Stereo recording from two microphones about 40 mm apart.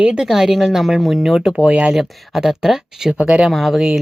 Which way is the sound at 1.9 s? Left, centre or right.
Centre.